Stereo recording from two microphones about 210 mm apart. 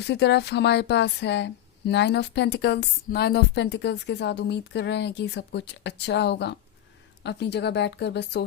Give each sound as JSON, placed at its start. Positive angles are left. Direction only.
{"t": 0.1, "sound": "speech", "side_deg": 55}